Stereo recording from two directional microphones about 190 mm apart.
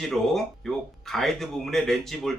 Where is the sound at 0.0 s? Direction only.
Centre (ahead or behind).